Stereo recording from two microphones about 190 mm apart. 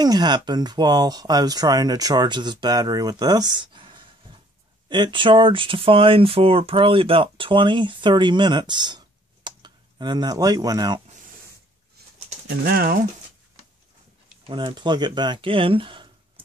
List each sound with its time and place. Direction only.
0.0 s speech: 20° right (ahead or behind)
12.6 s speech: 50° right (ahead or behind)
14.4 s speech: 25° right (ahead or behind)